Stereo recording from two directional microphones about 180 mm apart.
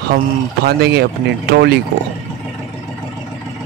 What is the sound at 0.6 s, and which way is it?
Speech, 65° right (ahead or behind).